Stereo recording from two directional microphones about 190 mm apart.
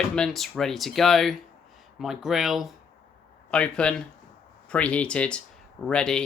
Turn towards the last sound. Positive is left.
turn(degrees=5)  # may be behind; listen again after turning